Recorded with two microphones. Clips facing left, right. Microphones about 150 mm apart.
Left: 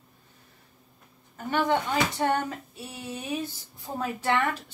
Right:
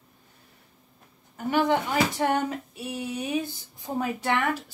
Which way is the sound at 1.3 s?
10° right (ahead or behind).